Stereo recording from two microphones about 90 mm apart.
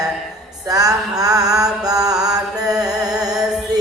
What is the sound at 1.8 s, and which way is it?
Music, 45° right (ahead or behind).